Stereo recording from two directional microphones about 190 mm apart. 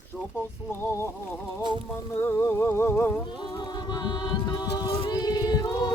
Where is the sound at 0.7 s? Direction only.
10° left (ahead or behind).